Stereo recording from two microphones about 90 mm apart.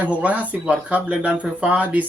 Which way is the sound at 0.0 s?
15° right (ahead or behind).